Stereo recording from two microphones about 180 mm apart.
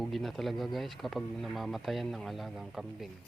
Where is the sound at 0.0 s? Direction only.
Centre (ahead or behind).